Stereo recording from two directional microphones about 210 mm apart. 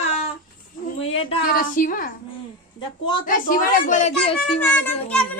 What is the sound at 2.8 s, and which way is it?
Speech, 20° left (ahead or behind).